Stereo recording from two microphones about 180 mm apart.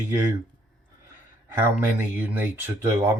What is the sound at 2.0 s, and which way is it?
Speech, 10° right (ahead or behind).